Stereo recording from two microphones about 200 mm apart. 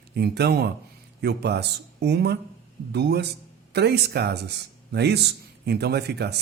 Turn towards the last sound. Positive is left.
turn(degrees=-55)  # may be behind; listen again after turning